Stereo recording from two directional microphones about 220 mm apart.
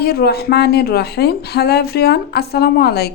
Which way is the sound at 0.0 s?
45° left (ahead or behind).